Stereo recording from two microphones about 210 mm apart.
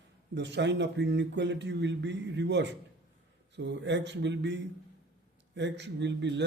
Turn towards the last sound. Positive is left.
turn(degrees=-55)  # may be behind; listen again after turning